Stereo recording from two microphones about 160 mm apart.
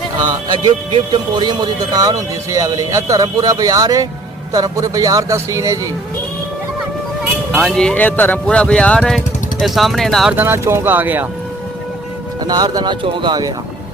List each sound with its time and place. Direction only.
0.3 s speech: 30° right (ahead or behind)
7.6 s speech: 5° left (ahead or behind)
10.3 s speech: 15° right (ahead or behind)
12.5 s speech: 25° right (ahead or behind)